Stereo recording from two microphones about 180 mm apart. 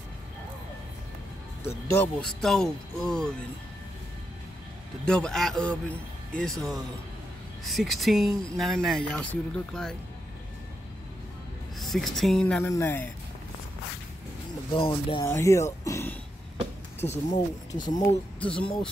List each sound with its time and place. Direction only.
1.7 s speech: 15° left (ahead or behind)
2.2 s speech: centre (ahead or behind)
5.0 s speech: 5° left (ahead or behind)
11.8 s speech: centre (ahead or behind)
14.7 s speech: 30° left (ahead or behind)
15.2 s speech: 15° left (ahead or behind)
18.4 s speech: 5° left (ahead or behind)